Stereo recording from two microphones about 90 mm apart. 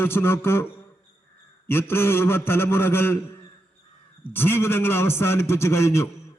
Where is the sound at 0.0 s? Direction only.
25° left (ahead or behind).